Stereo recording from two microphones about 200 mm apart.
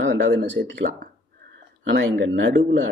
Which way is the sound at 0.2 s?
65° right (ahead or behind).